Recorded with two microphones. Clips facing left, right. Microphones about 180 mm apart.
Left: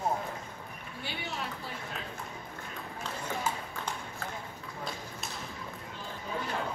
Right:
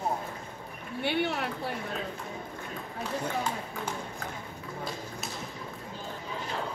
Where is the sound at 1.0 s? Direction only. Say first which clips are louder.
Right 10 dB; 65° right (ahead or behind).